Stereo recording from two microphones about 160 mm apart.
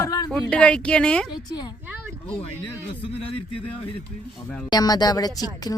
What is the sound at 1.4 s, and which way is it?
Speech, 25° left (ahead or behind).